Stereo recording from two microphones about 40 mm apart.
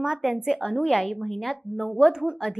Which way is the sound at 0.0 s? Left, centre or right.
Centre.